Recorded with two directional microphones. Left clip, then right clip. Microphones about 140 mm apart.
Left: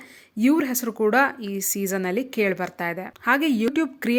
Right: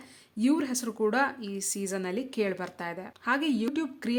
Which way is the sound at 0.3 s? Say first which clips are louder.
Left 6 dB; 30° left (ahead or behind).